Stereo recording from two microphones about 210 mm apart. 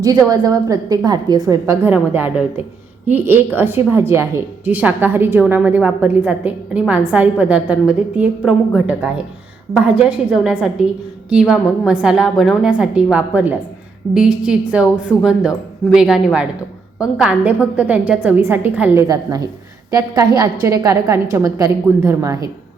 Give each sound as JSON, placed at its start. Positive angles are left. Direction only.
{"t": 0.3, "sound": "a woman's voice", "side_deg": -15}